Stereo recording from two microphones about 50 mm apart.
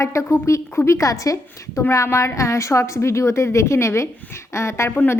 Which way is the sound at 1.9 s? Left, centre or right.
Left.